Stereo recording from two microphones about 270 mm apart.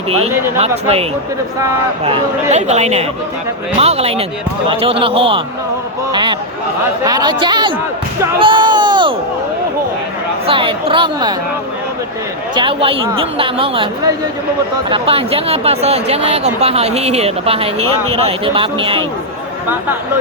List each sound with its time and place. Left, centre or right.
2.0 s speech: right
10.4 s speech: centre
12.5 s speech: centre